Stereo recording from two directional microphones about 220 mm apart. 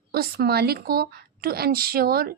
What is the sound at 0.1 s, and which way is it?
Speech, 45° right (ahead or behind).